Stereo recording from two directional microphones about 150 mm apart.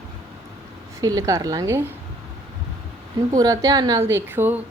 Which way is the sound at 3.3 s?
25° right (ahead or behind).